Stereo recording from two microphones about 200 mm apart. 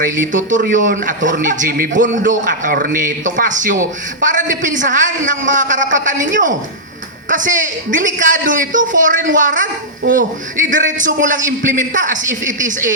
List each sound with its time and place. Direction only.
0.0 s a man's voice: 40° right (ahead or behind)